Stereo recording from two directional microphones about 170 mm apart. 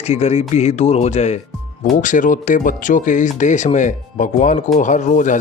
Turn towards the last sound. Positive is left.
turn(degrees=45)  # may be behind; listen again after turning